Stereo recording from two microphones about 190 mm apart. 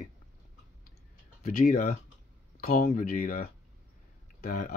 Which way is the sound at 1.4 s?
45° left (ahead or behind).